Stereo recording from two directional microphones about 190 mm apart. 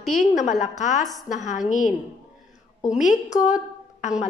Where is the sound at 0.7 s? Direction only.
40° left (ahead or behind).